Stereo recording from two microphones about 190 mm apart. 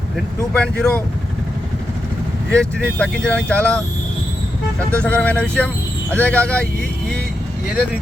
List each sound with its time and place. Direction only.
0.5 s speech: 5° left (ahead or behind)
2.6 s speech: 5° left (ahead or behind)
5.0 s speech: 10° left (ahead or behind)